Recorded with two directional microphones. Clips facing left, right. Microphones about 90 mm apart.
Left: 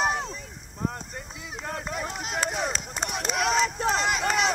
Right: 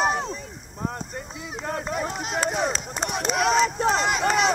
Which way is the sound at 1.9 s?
35° right (ahead or behind).